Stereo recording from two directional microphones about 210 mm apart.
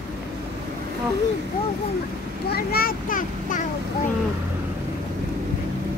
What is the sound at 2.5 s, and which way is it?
Speech, 45° left (ahead or behind).